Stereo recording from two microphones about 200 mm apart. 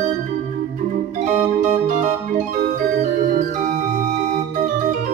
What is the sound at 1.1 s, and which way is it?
Music, 40° right (ahead or behind).